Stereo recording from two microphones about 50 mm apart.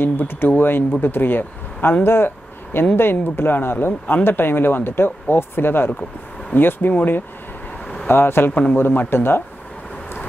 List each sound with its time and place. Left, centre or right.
0.0 s speech: left
6.9 s speech: left
8.1 s speech: left